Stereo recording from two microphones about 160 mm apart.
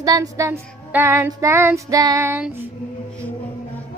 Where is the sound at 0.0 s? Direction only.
25° right (ahead or behind).